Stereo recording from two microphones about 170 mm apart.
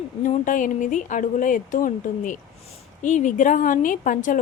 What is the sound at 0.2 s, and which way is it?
A woman's voice, 50° left (ahead or behind).